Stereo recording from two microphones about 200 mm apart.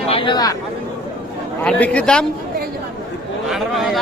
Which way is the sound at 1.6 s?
5° left (ahead or behind).